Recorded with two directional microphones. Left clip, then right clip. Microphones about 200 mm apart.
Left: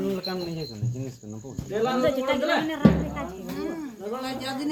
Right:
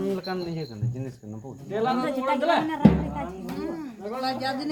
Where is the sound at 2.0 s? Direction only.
60° right (ahead or behind).